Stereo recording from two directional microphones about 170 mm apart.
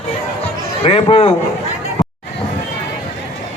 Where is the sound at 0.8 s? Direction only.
35° left (ahead or behind).